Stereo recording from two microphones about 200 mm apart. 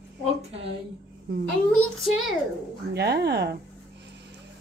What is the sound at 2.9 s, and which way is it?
Speech, 55° right (ahead or behind).